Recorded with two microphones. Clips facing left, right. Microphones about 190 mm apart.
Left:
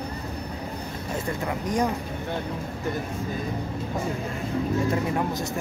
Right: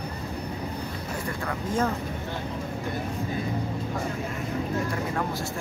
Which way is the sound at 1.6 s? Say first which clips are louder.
Left 1 dB; 15° left (ahead or behind).